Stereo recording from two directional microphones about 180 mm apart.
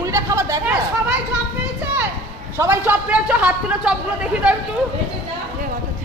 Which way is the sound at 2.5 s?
10° right (ahead or behind).